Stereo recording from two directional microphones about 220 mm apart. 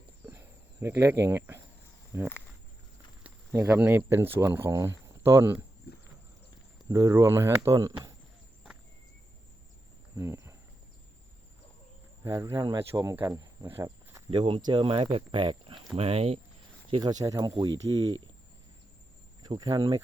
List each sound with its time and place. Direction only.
0.3 s cricket: 10° right (ahead or behind)
2.1 s speech: 15° right (ahead or behind)
6.8 s speech: 15° right (ahead or behind)
10.2 s cricket: 10° right (ahead or behind)
12.2 s speech: 15° right (ahead or behind)
14.3 s speech: 25° right (ahead or behind)
19.4 s speech: 20° right (ahead or behind)